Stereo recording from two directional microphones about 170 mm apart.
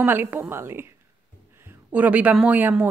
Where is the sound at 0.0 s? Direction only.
10° right (ahead or behind).